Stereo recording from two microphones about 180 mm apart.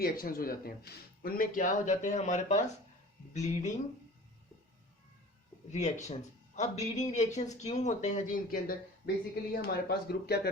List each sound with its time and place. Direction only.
0.0 s speech: 55° left (ahead or behind)
5.7 s speech: 40° left (ahead or behind); by 10.5 s 60° left (ahead or behind)